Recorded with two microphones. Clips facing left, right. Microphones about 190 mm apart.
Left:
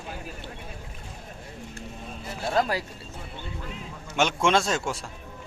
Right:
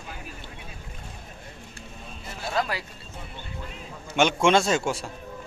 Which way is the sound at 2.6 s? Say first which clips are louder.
Left 3 dB; 40° left (ahead or behind).